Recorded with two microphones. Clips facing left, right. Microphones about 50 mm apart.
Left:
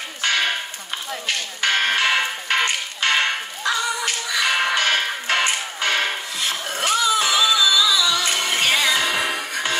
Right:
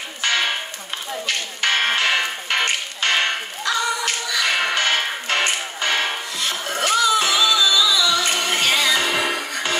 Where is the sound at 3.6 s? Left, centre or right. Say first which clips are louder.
Right 1 dB; centre.